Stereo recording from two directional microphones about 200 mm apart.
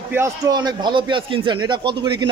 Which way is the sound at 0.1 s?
15° right (ahead or behind).